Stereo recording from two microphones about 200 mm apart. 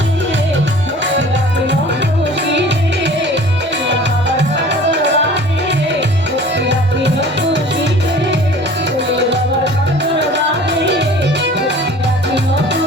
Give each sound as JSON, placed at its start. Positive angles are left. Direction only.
{"t": 2.5, "sound": "music", "side_deg": -60}
{"t": 4.4, "sound": "music", "side_deg": -60}
{"t": 10.0, "sound": "music", "side_deg": -60}